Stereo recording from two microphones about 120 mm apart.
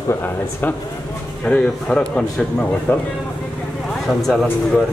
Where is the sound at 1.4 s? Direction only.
10° left (ahead or behind).